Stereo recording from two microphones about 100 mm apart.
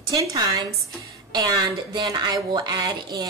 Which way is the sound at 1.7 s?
50° right (ahead or behind).